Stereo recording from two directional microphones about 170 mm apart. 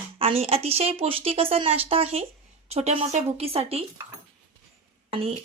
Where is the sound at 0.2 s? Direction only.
35° right (ahead or behind).